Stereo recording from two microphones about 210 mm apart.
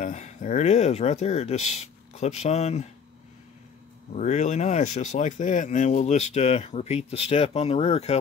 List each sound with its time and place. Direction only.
0.0 s speech: 35° left (ahead or behind)
4.1 s speech: 35° left (ahead or behind)